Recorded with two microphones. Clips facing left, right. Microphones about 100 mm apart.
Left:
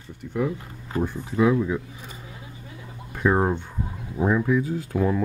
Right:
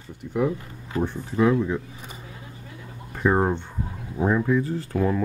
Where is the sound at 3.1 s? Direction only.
Centre (ahead or behind).